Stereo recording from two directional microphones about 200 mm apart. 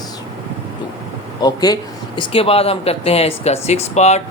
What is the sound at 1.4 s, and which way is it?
Speech, 20° left (ahead or behind).